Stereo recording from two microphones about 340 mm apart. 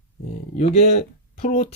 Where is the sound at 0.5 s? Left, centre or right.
Centre.